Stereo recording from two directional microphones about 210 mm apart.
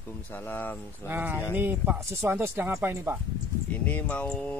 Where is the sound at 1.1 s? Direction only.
10° right (ahead or behind).